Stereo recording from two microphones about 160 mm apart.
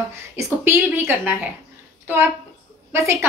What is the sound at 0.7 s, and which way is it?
Speech, 10° right (ahead or behind).